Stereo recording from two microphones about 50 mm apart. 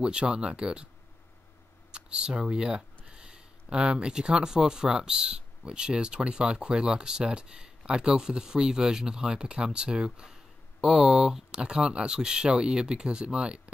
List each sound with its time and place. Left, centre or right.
0.0 s speech: centre
1.9 s a sound: centre
2.4 s speech: centre